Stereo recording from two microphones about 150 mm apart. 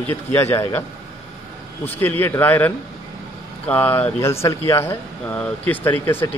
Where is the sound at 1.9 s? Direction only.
15° left (ahead or behind).